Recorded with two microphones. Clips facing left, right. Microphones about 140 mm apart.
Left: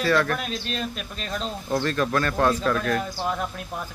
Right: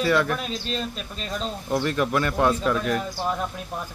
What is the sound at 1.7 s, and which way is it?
Speech, 15° right (ahead or behind).